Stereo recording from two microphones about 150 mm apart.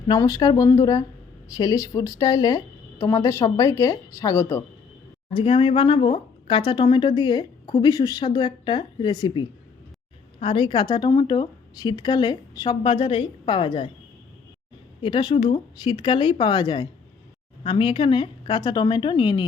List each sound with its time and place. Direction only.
0.2 s a woman's voice: 25° left (ahead or behind)
5.3 s speech: 35° left (ahead or behind)
10.4 s speech: 35° left (ahead or behind)
15.0 s speech: 30° left (ahead or behind)